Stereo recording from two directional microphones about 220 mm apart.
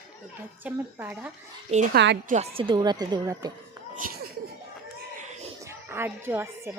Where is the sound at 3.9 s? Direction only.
40° right (ahead or behind).